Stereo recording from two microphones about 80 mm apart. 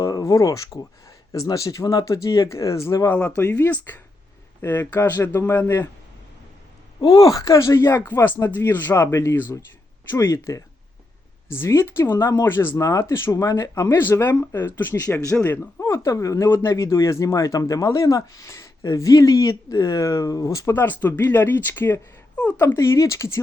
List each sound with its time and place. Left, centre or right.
0.0 s a sound: left
1.5 s speech: left
3.1 s speech: centre
7.0 s speech: left
12.8 s speech: left
13.3 s speech: left
13.8 s speech: left
15.0 s speech: left
15.4 s speech: left
15.8 s speech: left
20.7 s speech: left
22.6 s speech: left